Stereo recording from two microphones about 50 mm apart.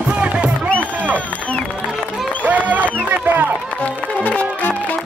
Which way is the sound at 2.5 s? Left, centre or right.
Right.